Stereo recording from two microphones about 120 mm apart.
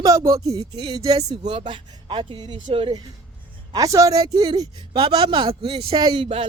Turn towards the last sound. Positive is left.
turn(degrees=-35)  # may be behind; listen again after turning